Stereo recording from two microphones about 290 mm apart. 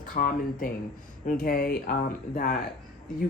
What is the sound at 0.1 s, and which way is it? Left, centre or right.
Speech, left.